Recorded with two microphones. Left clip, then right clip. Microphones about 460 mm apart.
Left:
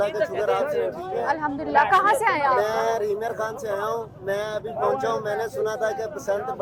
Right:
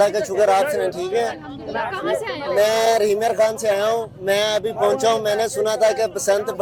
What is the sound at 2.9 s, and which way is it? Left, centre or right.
Speech, right.